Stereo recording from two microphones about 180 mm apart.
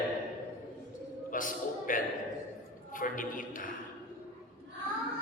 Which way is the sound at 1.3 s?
50° left (ahead or behind).